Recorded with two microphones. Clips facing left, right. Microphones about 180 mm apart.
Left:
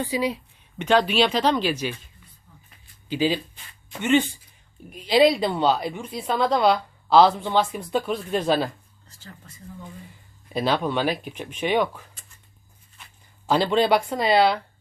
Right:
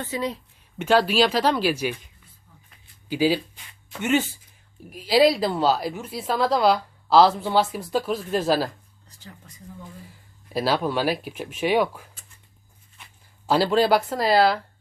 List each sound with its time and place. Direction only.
0.0 s speech: 10° left (ahead or behind)
0.8 s speech: 5° right (ahead or behind)
3.1 s a woman's voice: 10° right (ahead or behind)
9.0 s a sound: 15° right (ahead or behind)
10.5 s a woman's voice: 5° right (ahead or behind)
13.5 s a woman's voice: 5° right (ahead or behind)